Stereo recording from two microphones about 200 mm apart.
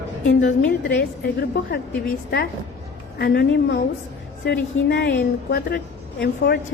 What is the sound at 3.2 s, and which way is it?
A woman's voice, 55° left (ahead or behind).